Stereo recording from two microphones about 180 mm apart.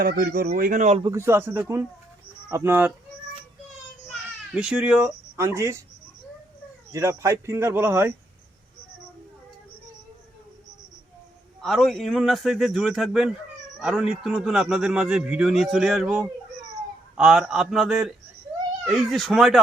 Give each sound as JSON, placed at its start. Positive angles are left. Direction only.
{"t": 0.0, "sound": "a man's voice", "side_deg": -60}
{"t": 1.0, "sound": "speech", "side_deg": -15}
{"t": 4.5, "sound": "a man's voice", "side_deg": -5}
{"t": 6.9, "sound": "speech", "side_deg": -15}
{"t": 11.6, "sound": "a man's voice", "side_deg": 0}